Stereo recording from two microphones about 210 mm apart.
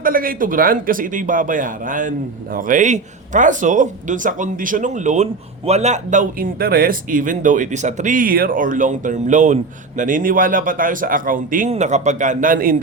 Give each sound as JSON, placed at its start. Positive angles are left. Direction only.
{"t": 0.0, "sound": "speech", "side_deg": -45}